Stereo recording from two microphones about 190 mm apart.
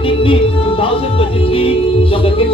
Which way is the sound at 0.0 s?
30° left (ahead or behind).